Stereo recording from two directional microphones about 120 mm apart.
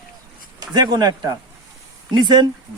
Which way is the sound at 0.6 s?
35° right (ahead or behind).